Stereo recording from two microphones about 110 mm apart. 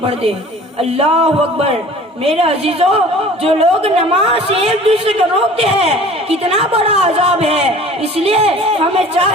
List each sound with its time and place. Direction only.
0.8 s a woman's voice: 65° right (ahead or behind)